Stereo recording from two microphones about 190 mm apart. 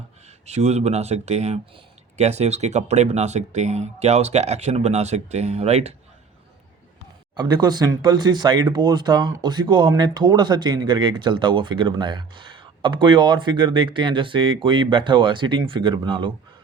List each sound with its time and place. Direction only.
0.4 s speech: 35° right (ahead or behind)
7.3 s speech: 20° right (ahead or behind)